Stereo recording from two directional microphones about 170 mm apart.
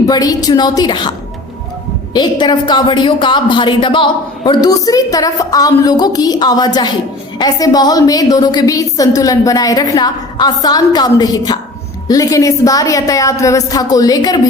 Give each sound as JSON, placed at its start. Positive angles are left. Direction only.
{"t": 0.0, "sound": "a woman's voice", "side_deg": 20}
{"t": 2.1, "sound": "a woman's voice", "side_deg": 25}